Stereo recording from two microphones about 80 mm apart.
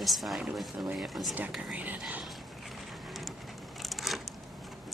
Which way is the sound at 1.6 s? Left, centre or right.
Centre.